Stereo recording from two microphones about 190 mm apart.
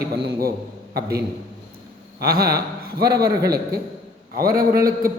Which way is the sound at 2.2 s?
55° right (ahead or behind).